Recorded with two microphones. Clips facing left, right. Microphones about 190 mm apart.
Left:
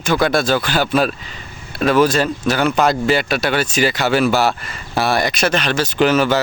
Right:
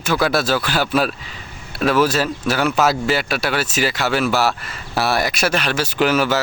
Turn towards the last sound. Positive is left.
turn(degrees=-5)  # may be behind; listen again after turning